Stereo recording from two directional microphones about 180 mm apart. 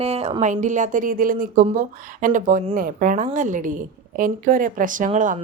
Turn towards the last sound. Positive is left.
turn(degrees=-45)  # may be behind; listen again after turning